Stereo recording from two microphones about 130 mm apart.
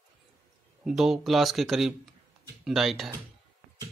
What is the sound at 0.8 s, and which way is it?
Speech, 5° right (ahead or behind).